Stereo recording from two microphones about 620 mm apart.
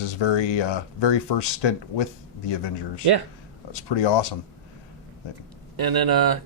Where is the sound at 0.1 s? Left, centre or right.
Left.